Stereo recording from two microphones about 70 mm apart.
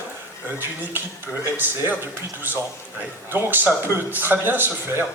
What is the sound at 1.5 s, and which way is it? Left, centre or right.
Speech, right.